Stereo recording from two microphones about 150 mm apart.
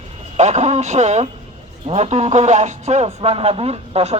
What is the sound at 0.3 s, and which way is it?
Speech, 50° right (ahead or behind).